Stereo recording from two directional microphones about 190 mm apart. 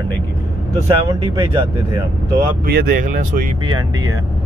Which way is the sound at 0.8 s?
20° right (ahead or behind).